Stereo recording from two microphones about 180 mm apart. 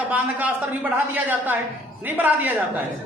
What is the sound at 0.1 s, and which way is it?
A man's voice, 10° right (ahead or behind).